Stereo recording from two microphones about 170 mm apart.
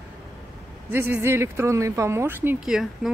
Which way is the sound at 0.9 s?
15° right (ahead or behind).